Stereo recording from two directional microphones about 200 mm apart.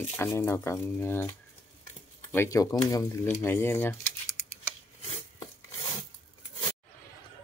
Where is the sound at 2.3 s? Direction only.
15° left (ahead or behind).